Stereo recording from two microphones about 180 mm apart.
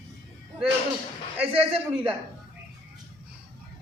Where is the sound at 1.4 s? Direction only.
30° right (ahead or behind).